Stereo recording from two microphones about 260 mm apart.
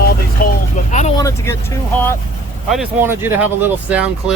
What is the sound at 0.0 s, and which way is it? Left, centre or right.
Vehicle, left.